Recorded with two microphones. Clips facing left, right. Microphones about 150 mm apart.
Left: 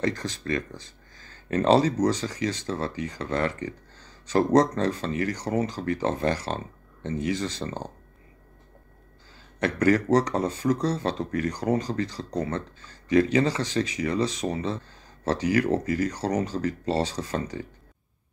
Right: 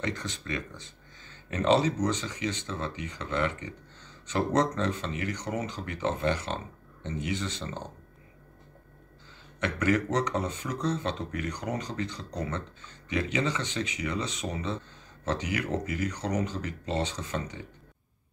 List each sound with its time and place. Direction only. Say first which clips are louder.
0.0 s speech: left 6 dB; 35° left (ahead or behind)
9.6 s speech: left 5 dB; 35° left (ahead or behind)